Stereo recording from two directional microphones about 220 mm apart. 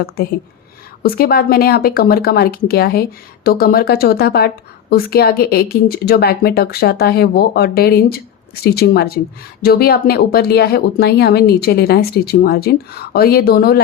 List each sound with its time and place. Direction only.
1.0 s speech: 45° left (ahead or behind)